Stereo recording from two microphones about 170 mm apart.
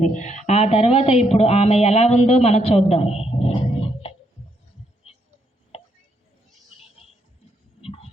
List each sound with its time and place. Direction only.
0.0 s speech: 45° left (ahead or behind)
7.0 s music: 35° left (ahead or behind)
7.8 s a sound: 35° left (ahead or behind)